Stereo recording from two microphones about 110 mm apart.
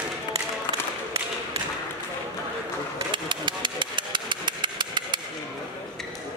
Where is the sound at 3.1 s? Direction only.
45° right (ahead or behind).